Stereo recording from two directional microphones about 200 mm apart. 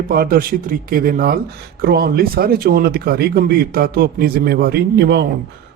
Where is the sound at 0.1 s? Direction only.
45° right (ahead or behind).